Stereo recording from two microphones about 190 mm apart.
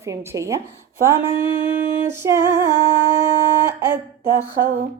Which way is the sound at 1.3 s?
40° right (ahead or behind).